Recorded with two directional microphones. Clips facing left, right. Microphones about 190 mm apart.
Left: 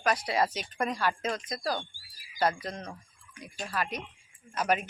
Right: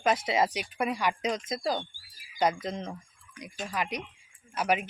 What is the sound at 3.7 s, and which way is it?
Speech, 15° right (ahead or behind).